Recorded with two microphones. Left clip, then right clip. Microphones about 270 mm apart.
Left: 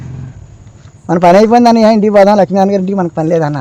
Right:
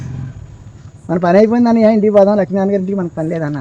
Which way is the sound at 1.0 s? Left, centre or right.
Left.